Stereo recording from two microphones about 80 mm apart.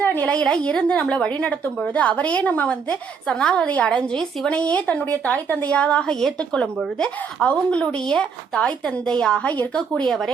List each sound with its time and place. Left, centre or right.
0.0 s a woman's voice: left
10.1 s speech: centre